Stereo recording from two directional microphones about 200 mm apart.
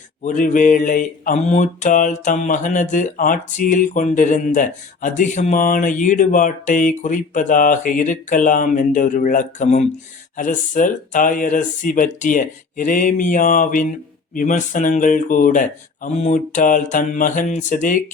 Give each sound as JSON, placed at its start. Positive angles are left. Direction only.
{"t": 0.2, "sound": "mantra", "side_deg": 40}